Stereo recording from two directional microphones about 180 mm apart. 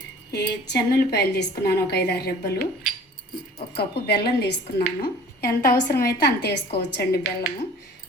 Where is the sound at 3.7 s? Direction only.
65° left (ahead or behind).